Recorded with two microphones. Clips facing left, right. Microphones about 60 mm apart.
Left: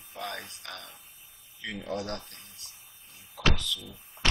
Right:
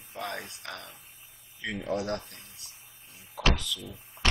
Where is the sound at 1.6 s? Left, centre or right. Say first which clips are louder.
Right 3 dB; centre.